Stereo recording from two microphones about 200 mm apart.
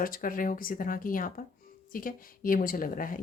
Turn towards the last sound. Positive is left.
turn(degrees=45)  # may be behind; listen again after turning